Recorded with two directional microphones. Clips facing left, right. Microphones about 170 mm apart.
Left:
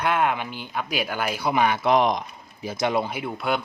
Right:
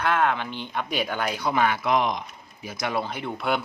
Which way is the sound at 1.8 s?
35° left (ahead or behind).